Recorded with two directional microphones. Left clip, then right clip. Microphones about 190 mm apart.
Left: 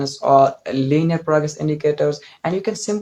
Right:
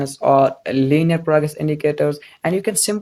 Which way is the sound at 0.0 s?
45° right (ahead or behind).